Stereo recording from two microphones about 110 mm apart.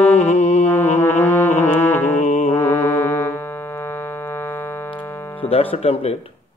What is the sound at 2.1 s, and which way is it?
Mantra, 90° left.